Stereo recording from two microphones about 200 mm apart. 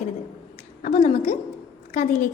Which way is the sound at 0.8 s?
35° left (ahead or behind).